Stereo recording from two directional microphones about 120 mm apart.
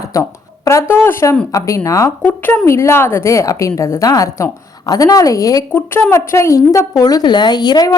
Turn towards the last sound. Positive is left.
turn(degrees=35)  # may be behind; listen again after turning